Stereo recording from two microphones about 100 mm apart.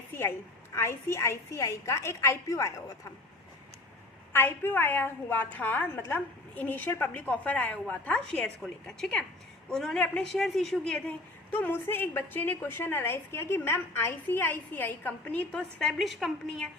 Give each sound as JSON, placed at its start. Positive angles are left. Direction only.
{"t": 0.1, "sound": "a sound", "side_deg": 25}
{"t": 0.8, "sound": "a woman's voice", "side_deg": 25}
{"t": 4.3, "sound": "a woman's voice", "side_deg": 25}
{"t": 11.5, "sound": "a woman's voice", "side_deg": 20}